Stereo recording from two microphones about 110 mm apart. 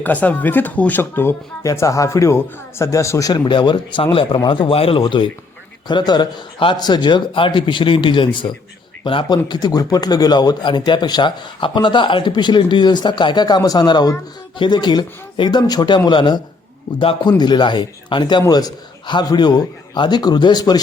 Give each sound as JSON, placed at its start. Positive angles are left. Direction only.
{"t": 0.0, "sound": "a man's voice", "side_deg": 15}
{"t": 5.9, "sound": "a man's voice", "side_deg": 40}
{"t": 9.5, "sound": "speech", "side_deg": 40}